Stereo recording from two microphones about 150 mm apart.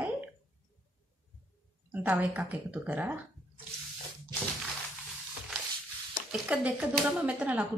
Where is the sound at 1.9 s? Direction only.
10° right (ahead or behind).